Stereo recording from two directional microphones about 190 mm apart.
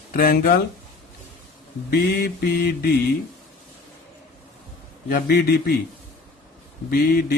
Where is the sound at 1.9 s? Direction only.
55° left (ahead or behind).